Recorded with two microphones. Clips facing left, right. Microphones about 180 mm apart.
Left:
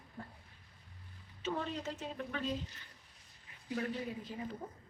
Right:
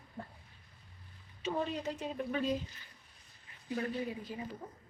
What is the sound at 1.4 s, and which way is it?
A woman's voice, 15° right (ahead or behind).